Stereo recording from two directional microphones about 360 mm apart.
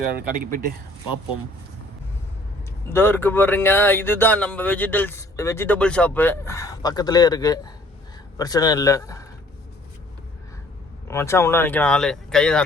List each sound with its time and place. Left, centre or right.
0.3 s speech: right
2.9 s speech: centre
11.1 s speech: centre